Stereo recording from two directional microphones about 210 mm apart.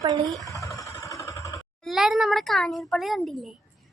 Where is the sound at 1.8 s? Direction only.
Centre (ahead or behind).